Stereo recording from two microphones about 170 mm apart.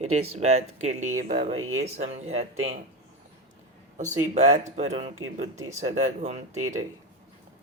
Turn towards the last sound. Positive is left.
turn(degrees=-40)  # may be behind; listen again after turning